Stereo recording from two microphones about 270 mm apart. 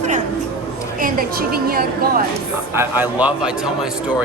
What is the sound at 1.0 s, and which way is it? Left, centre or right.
A woman's voice, right.